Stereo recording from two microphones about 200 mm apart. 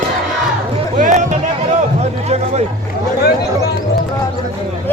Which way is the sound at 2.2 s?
30° right (ahead or behind).